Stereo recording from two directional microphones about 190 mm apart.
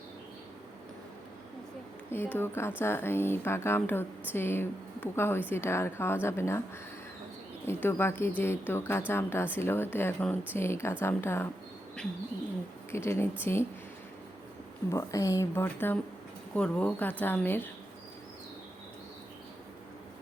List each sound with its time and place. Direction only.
2.0 s speech: 10° left (ahead or behind)
7.7 s speech: 10° left (ahead or behind)
12.9 s speech: 15° left (ahead or behind)
14.8 s speech: 15° left (ahead or behind)